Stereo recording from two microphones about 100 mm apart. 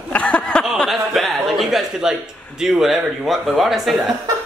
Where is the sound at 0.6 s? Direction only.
Centre (ahead or behind).